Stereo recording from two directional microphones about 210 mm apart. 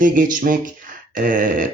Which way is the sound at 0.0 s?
40° right (ahead or behind).